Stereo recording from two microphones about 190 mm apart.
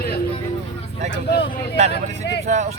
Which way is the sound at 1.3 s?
60° left (ahead or behind).